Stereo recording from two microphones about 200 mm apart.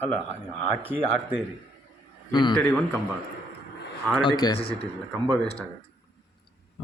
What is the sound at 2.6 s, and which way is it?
Speech, 10° left (ahead or behind).